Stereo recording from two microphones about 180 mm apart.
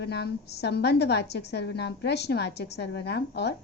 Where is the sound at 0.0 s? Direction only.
65° left (ahead or behind).